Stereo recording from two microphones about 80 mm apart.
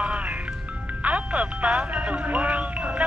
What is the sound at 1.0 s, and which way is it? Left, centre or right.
Speech, centre.